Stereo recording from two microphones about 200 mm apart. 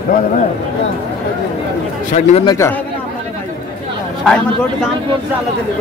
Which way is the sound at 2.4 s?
15° left (ahead or behind).